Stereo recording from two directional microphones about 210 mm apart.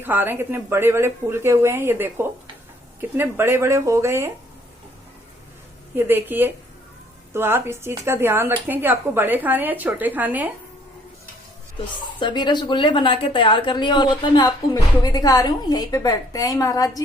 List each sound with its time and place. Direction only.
0.0 s speech: 10° right (ahead or behind)
6.0 s speech: 10° right (ahead or behind)
12.2 s a woman's voice: 20° left (ahead or behind)